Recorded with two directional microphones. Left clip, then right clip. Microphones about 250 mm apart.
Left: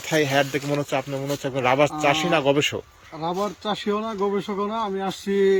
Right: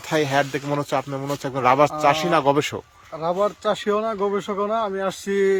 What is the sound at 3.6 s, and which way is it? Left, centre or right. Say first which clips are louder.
Speech: right 4 dB; centre.